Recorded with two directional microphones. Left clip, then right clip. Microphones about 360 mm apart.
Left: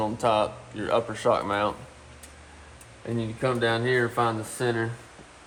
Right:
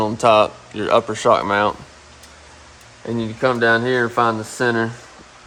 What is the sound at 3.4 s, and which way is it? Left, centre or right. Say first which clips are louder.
Speech: right 10 dB; centre.